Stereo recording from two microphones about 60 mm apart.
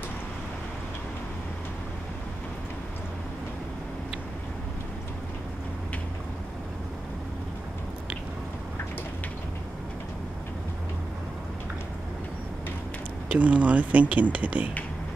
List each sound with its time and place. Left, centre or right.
13.3 s speech: right